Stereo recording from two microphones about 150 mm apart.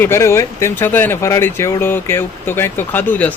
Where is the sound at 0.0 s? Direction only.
15° left (ahead or behind).